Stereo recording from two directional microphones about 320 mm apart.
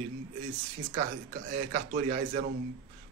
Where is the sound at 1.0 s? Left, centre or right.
Right.